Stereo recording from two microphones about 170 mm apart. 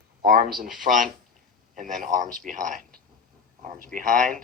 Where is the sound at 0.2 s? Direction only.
55° right (ahead or behind).